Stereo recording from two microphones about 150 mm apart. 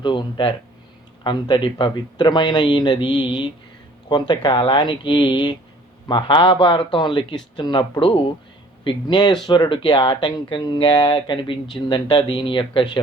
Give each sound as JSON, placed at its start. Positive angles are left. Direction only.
{"t": 0.0, "sound": "speech", "side_deg": 30}